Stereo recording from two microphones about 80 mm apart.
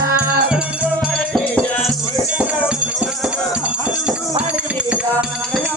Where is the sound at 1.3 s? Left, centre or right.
Centre.